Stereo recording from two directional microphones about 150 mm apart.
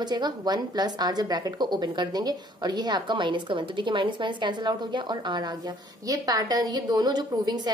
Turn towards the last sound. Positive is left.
turn(degrees=-30)  # may be behind; listen again after turning